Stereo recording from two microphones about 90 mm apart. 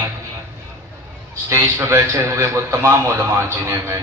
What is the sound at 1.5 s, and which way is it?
Speech, 30° right (ahead or behind).